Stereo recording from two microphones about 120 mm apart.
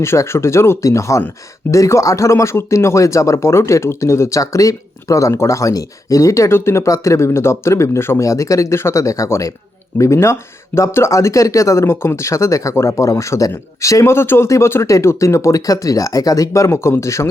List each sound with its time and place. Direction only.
0.0 s speech: 20° left (ahead or behind)